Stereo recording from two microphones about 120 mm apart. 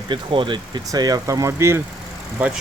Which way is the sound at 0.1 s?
45° right (ahead or behind).